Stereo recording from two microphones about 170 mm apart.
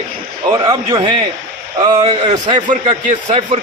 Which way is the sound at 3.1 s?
40° right (ahead or behind).